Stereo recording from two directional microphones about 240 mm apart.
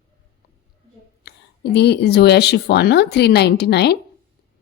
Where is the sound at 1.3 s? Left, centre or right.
Left.